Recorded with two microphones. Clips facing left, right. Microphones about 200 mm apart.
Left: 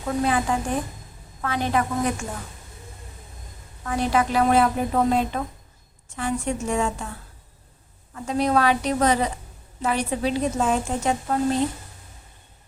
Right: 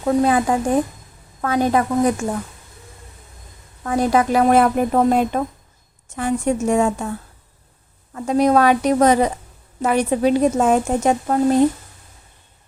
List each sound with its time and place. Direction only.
0.2 s a woman's voice: 40° right (ahead or behind)
3.8 s a woman's voice: 45° right (ahead or behind)
8.1 s a woman's voice: 45° right (ahead or behind)